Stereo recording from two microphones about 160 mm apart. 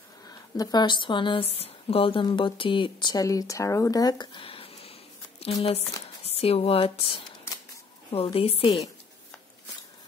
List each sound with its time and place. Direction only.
0.6 s speech: 25° left (ahead or behind)